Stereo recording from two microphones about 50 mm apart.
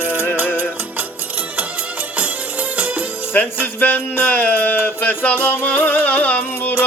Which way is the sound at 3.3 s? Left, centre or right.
Left.